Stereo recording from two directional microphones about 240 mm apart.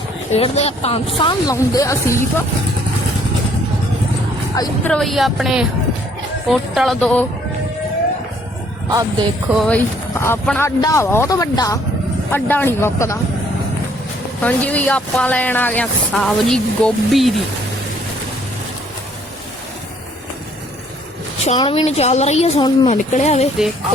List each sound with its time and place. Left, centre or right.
0.3 s a woman's voice: left
4.5 s speech: centre
4.9 s speech: centre
9.5 s speech: centre
14.4 s speech: centre
21.4 s a woman's voice: left